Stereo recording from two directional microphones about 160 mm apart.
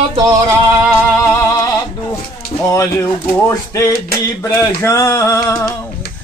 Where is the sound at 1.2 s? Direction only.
15° left (ahead or behind).